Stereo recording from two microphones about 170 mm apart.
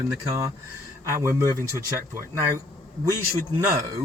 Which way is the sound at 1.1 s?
15° right (ahead or behind).